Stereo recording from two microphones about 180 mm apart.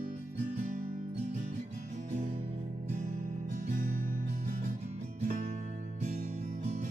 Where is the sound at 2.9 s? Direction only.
45° right (ahead or behind).